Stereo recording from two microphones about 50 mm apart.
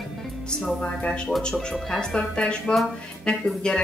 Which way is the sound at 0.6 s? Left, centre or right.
Centre.